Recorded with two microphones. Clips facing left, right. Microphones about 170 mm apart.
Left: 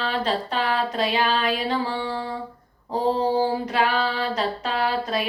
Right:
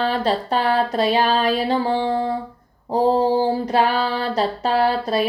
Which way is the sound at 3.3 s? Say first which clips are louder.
Right 4 dB; 35° right (ahead or behind).